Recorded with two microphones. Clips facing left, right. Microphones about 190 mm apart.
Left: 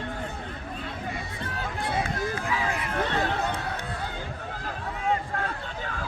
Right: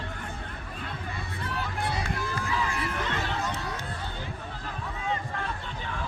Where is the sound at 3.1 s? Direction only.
40° left (ahead or behind).